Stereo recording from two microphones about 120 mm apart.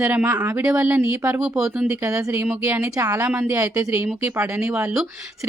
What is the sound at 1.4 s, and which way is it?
Speech, 5° right (ahead or behind).